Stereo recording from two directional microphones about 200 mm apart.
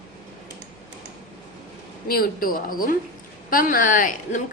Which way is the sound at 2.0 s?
45° left (ahead or behind).